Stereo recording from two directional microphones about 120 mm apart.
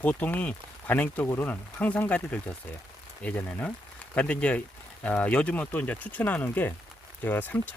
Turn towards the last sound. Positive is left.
turn(degrees=15)  # may be behind; listen again after turning